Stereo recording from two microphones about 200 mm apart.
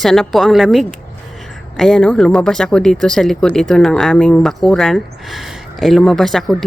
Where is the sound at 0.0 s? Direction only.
Centre (ahead or behind).